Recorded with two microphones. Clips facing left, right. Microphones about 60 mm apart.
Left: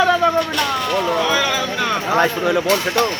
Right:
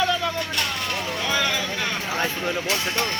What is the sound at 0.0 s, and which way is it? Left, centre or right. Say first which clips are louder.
Vehicle: left 9 dB; left.